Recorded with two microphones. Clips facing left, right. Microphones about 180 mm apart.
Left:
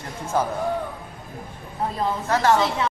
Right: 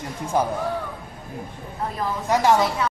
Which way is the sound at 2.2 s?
15° right (ahead or behind).